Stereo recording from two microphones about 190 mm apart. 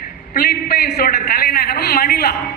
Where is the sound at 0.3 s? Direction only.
55° left (ahead or behind).